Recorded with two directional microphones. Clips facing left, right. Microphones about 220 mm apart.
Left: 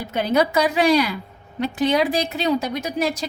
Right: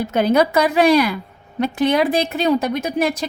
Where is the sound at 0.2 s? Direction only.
55° right (ahead or behind).